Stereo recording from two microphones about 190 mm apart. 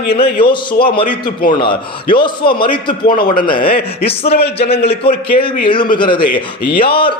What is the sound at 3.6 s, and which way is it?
Speech, 55° left (ahead or behind).